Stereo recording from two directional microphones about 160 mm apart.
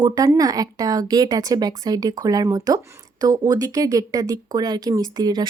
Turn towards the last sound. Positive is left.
turn(degrees=-25)  # may be behind; listen again after turning